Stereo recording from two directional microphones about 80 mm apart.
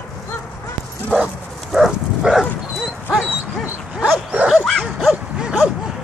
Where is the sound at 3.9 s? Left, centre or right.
Centre.